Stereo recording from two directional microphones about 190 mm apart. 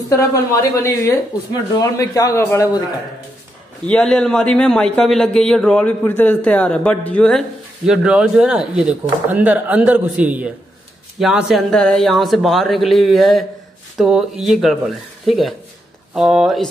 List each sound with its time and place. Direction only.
0.1 s speech: 15° left (ahead or behind)
3.8 s a man's voice: 5° left (ahead or behind)